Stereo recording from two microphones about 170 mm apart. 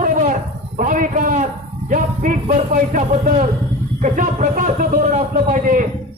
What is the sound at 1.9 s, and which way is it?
Music, 50° right (ahead or behind).